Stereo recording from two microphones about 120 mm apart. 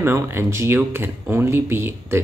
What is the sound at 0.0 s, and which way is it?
Speech, 20° right (ahead or behind).